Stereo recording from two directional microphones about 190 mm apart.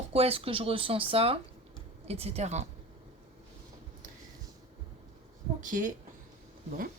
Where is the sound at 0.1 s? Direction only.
30° right (ahead or behind).